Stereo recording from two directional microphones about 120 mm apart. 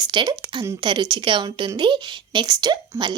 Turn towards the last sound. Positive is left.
turn(degrees=-40)  # may be behind; listen again after turning